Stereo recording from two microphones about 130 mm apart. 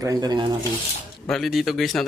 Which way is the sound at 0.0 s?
30° right (ahead or behind).